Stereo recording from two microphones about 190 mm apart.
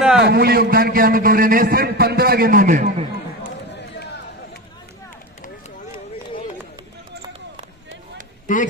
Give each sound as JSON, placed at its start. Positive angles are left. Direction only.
{"t": 0.0, "sound": "a man's voice", "side_deg": -5}
{"t": 0.3, "sound": "a man's voice", "side_deg": -55}
{"t": 8.5, "sound": "speech", "side_deg": 45}